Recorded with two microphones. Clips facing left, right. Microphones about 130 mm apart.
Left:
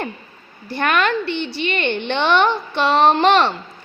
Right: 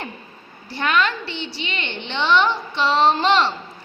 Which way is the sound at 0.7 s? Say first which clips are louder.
Left 3 dB; 55° left (ahead or behind).